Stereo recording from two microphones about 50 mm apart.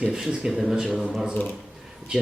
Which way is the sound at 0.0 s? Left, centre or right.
Centre.